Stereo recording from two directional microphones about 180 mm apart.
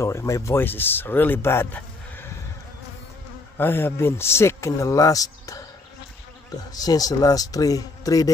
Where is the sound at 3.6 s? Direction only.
10° left (ahead or behind).